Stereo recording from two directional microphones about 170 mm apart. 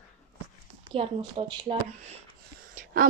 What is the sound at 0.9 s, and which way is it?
Speech, 30° right (ahead or behind).